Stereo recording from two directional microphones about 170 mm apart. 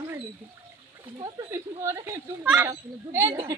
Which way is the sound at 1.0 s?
30° right (ahead or behind).